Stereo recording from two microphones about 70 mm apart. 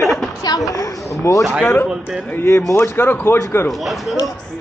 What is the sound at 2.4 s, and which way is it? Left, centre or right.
Speech, left.